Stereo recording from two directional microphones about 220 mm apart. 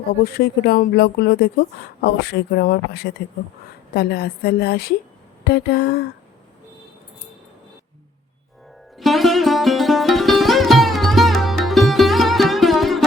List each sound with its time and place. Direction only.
0.3 s speech: 45° left (ahead or behind)
9.0 s music: centre (ahead or behind)